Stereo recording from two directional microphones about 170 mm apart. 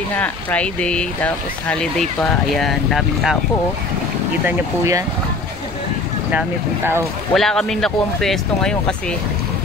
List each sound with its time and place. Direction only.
0.2 s speech: 10° left (ahead or behind)
4.5 s speech: 20° right (ahead or behind)
7.3 s speech: centre (ahead or behind)